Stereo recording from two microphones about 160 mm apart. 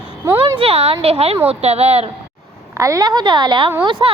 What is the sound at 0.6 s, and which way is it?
A woman's voice, 40° right (ahead or behind).